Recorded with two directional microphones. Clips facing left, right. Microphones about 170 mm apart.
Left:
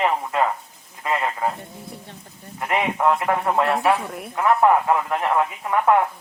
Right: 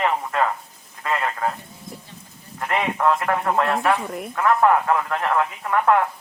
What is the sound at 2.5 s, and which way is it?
Speech, 15° left (ahead or behind).